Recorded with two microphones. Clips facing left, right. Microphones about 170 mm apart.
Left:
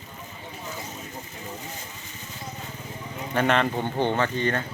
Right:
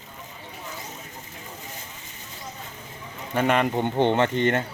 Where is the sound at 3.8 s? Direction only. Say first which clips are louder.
Right 4 dB; 20° right (ahead or behind).